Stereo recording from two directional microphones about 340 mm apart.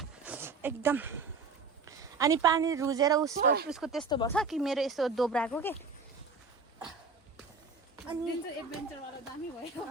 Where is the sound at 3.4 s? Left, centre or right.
Right.